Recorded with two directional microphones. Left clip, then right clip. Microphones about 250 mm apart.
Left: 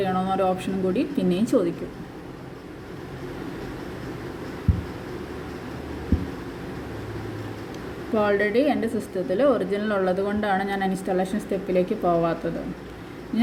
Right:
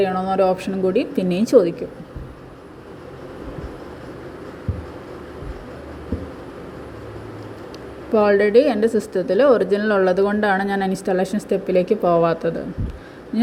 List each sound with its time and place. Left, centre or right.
0.0 s a woman's voice: right
8.1 s a woman's voice: right